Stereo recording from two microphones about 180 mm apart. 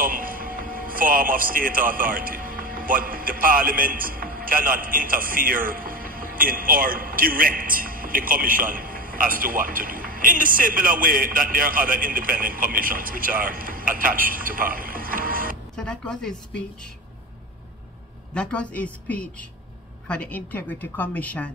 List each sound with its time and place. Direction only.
0.0 s a man's voice: 50° right (ahead or behind)
15.7 s speech: 5° left (ahead or behind)
18.3 s a woman's voice: 5° left (ahead or behind)